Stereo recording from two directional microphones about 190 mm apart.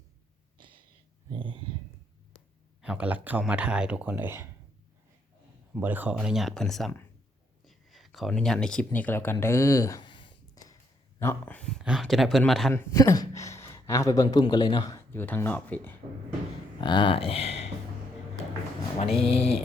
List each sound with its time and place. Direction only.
1.3 s speech: 25° right (ahead or behind)
2.8 s speech: 5° right (ahead or behind)
5.7 s speech: 10° right (ahead or behind)
12.7 s speech: 15° left (ahead or behind)
16.8 s speech: 25° left (ahead or behind)
18.9 s a sound: 30° left (ahead or behind)